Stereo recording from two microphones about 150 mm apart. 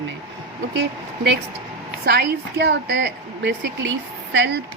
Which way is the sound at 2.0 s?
90° right.